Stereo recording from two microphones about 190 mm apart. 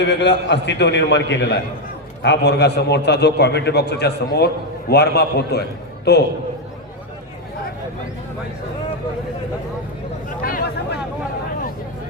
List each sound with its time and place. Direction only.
0.0 s a man's voice: 65° left (ahead or behind)
10.2 s speech: 50° left (ahead or behind)